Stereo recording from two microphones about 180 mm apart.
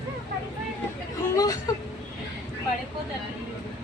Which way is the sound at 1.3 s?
20° left (ahead or behind).